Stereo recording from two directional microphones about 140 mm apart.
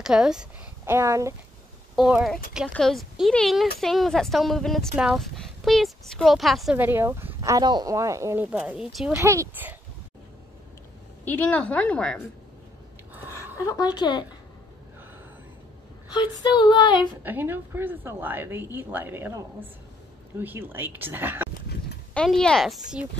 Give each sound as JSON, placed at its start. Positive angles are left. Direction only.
{"t": 0.0, "sound": "a woman's voice", "side_deg": -5}
{"t": 0.8, "sound": "speech", "side_deg": -20}
{"t": 2.0, "sound": "a woman's voice", "side_deg": -5}
{"t": 6.8, "sound": "speech", "side_deg": -15}
{"t": 8.5, "sound": "a woman's voice", "side_deg": -5}
{"t": 9.1, "sound": "speech", "side_deg": -20}
{"t": 11.2, "sound": "a woman's voice", "side_deg": 10}
{"t": 13.7, "sound": "speech", "side_deg": 30}
{"t": 16.1, "sound": "speech", "side_deg": 30}
{"t": 17.2, "sound": "a woman's voice", "side_deg": -15}
{"t": 22.1, "sound": "a woman's voice", "side_deg": 5}